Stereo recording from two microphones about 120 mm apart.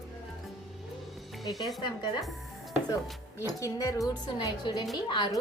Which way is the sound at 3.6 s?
30° left (ahead or behind).